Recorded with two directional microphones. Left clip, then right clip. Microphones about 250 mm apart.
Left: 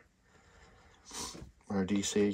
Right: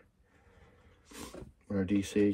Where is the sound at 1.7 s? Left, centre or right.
Centre.